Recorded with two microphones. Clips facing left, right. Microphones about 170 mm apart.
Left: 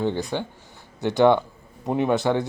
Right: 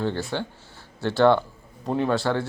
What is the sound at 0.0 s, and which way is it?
Speech, 15° left (ahead or behind).